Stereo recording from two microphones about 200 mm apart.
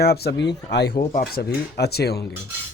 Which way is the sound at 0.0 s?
55° left (ahead or behind).